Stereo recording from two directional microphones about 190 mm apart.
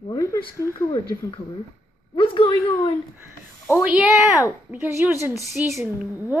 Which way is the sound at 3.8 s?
5° right (ahead or behind).